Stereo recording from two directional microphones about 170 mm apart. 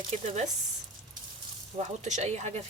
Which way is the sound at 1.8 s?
45° right (ahead or behind).